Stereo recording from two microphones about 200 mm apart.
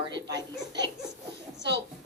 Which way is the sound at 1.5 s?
60° right (ahead or behind).